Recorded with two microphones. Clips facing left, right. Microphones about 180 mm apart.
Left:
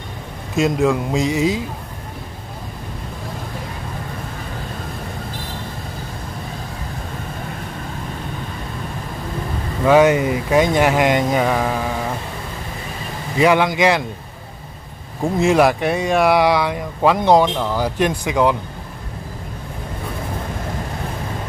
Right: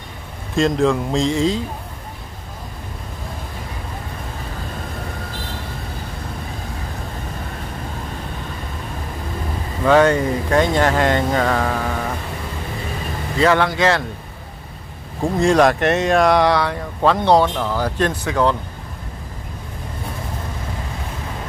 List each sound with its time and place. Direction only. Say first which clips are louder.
0.6 s a man's voice: even; 5° left (ahead or behind)
9.8 s speech: left 1 dB; 10° left (ahead or behind)
13.4 s speech: left 1 dB; 15° left (ahead or behind)
15.3 s a man's voice: even; 5° left (ahead or behind)